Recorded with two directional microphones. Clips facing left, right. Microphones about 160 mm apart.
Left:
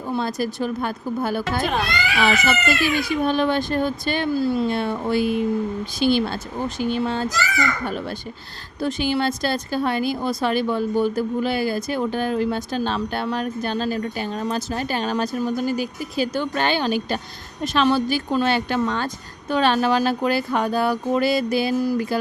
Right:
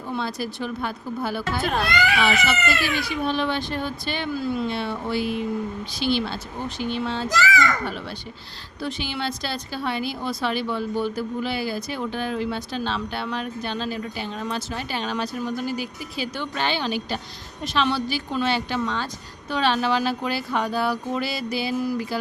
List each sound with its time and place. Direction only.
0.1 s speech: 45° left (ahead or behind)
4.7 s speech: 50° left (ahead or behind)
7.3 s a child's voice: 90° right
8.8 s speech: 45° left (ahead or behind)